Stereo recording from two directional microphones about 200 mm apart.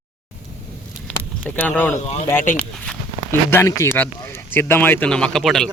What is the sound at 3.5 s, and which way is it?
Speech, 15° left (ahead or behind).